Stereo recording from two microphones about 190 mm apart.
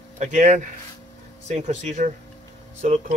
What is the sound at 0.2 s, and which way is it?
Speech, 40° right (ahead or behind).